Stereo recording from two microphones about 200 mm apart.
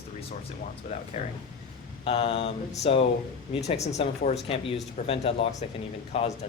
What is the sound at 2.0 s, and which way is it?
Speech, 30° left (ahead or behind).